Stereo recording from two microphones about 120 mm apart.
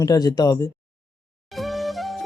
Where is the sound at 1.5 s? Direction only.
Centre (ahead or behind).